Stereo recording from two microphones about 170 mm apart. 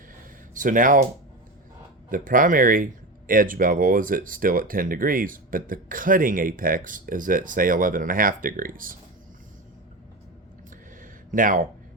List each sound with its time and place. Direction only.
0.5 s speech: 50° right (ahead or behind)
2.0 s speech: 50° right (ahead or behind)
11.0 s a sound: 50° right (ahead or behind)